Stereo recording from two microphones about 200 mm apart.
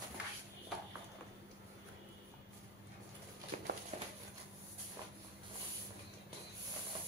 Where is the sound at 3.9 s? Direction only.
30° right (ahead or behind).